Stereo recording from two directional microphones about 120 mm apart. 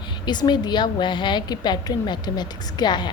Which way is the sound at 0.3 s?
35° left (ahead or behind).